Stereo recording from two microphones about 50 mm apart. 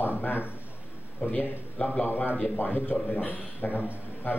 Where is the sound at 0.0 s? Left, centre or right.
Left.